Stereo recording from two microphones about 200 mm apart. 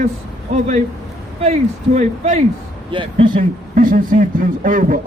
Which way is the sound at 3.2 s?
45° right (ahead or behind).